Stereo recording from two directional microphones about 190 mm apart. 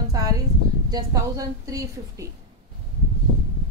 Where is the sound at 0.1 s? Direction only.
20° right (ahead or behind).